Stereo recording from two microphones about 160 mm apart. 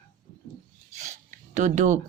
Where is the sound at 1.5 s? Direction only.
50° right (ahead or behind).